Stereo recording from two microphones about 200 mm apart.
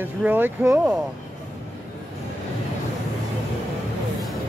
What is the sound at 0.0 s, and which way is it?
Speech, 10° right (ahead or behind).